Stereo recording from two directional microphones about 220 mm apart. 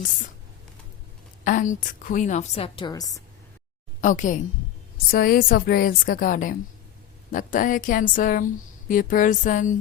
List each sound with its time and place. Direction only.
1.5 s a woman's voice: 35° left (ahead or behind); by 3.2 s 15° left (ahead or behind)
4.0 s a woman's voice: 35° left (ahead or behind)